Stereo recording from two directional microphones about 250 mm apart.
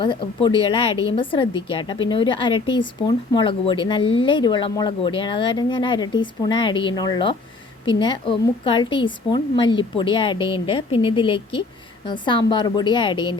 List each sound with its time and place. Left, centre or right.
0.0 s a woman's voice: centre